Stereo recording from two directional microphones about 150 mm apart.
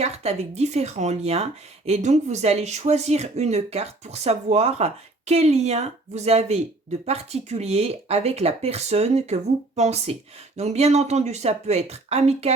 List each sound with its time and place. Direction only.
0.0 s speech: 45° right (ahead or behind)
7.6 s speech: 45° right (ahead or behind)